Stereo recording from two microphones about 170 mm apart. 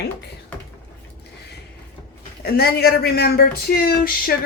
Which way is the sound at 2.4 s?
65° left (ahead or behind).